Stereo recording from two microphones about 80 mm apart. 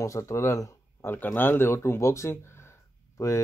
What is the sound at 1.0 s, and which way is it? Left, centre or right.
Speech, left.